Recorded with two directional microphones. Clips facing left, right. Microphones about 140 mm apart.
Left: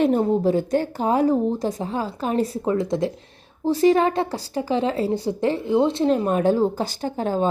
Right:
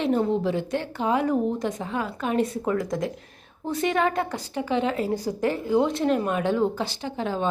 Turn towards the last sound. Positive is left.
turn(degrees=45)  # may be behind; listen again after turning